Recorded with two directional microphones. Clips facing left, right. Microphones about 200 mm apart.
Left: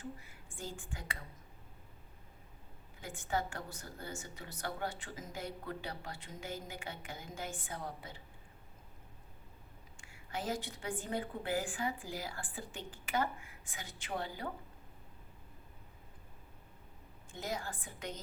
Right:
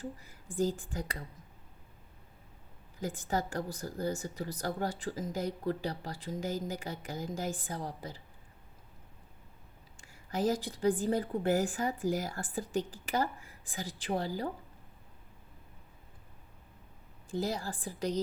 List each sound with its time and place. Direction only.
0.0 s speech: 40° right (ahead or behind)
3.0 s speech: 40° right (ahead or behind)
10.0 s speech: 40° right (ahead or behind)
17.3 s speech: 35° right (ahead or behind)